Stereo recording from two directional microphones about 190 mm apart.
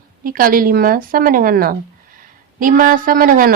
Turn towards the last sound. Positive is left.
turn(degrees=-50)  # may be behind; listen again after turning